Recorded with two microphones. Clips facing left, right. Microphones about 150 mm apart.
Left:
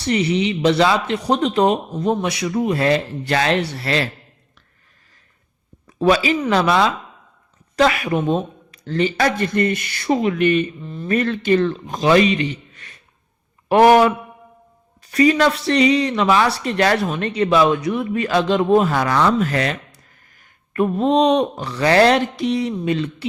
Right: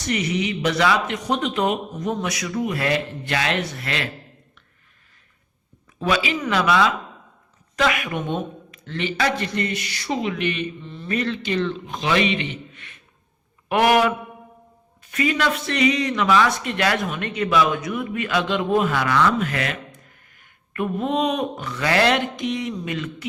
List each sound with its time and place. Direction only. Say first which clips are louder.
0.0 s speech: left 5 dB; 30° left (ahead or behind)
6.0 s a man's voice: left 6 dB; 35° left (ahead or behind)